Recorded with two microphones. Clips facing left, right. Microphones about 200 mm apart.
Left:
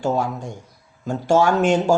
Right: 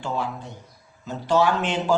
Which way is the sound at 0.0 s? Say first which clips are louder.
Left 6 dB; 45° left (ahead or behind).